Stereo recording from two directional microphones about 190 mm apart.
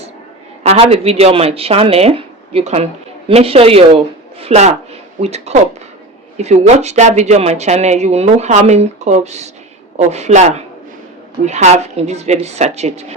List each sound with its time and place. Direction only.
0.6 s speech: 30° right (ahead or behind)